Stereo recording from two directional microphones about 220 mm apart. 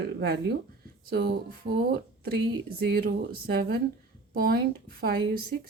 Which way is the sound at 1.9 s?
45° right (ahead or behind).